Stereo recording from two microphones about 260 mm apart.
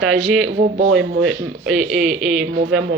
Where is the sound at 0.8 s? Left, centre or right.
Right.